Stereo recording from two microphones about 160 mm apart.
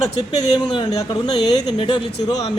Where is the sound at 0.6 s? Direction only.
25° left (ahead or behind).